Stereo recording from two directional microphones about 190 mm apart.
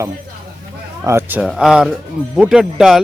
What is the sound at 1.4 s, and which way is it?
Speech, centre (ahead or behind).